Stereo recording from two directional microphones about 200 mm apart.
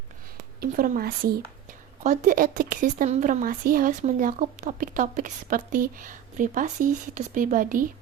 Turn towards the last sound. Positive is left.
turn(degrees=-45)  # may be behind; listen again after turning